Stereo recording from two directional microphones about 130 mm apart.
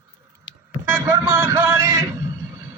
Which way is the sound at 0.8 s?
20° right (ahead or behind).